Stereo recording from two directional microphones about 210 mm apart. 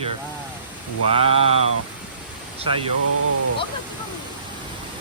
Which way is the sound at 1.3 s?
70° left (ahead or behind).